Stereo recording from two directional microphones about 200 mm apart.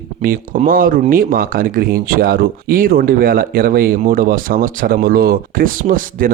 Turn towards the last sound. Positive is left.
turn(degrees=-45)  # may be behind; listen again after turning